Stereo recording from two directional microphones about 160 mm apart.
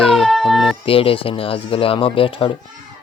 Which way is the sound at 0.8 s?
35° left (ahead or behind).